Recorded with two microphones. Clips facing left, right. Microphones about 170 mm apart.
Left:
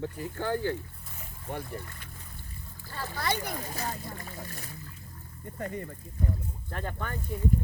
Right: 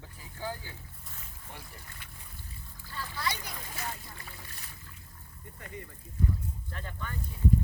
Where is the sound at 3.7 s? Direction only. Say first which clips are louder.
Left 5 dB; 40° left (ahead or behind).